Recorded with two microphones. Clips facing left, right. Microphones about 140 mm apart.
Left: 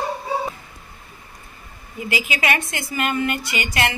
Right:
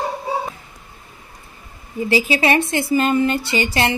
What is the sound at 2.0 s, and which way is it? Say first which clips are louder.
A woman's voice: right 7 dB; 35° right (ahead or behind).